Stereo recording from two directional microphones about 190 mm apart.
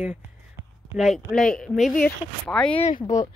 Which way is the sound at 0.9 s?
Centre (ahead or behind).